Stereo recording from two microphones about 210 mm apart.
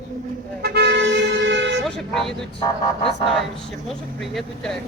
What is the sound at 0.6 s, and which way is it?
Vehicle, 50° right (ahead or behind).